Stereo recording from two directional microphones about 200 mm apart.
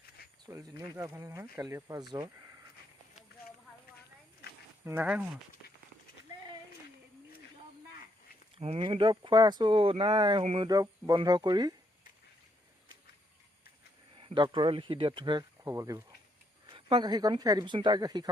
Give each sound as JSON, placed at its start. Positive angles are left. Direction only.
{"t": 0.4, "sound": "speech", "side_deg": -15}
{"t": 4.9, "sound": "speech", "side_deg": -10}
{"t": 8.5, "sound": "speech", "side_deg": -30}
{"t": 10.4, "sound": "a sound", "side_deg": -30}
{"t": 10.7, "sound": "speech", "side_deg": -20}
{"t": 14.2, "sound": "speech", "side_deg": -25}